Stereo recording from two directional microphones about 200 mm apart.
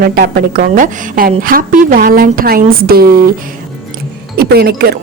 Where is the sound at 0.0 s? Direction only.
50° right (ahead or behind).